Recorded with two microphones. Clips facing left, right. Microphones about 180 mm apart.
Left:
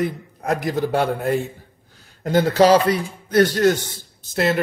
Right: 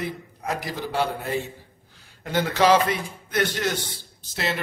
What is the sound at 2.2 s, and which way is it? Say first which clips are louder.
A man's voice: left 5 dB; 35° left (ahead or behind).